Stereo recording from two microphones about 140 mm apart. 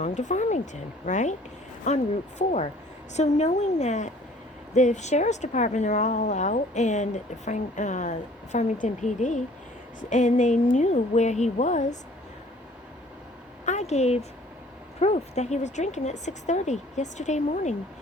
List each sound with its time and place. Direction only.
0.0 s speech: 60° left (ahead or behind)
3.2 s speech: 55° left (ahead or behind)
13.7 s speech: 55° left (ahead or behind)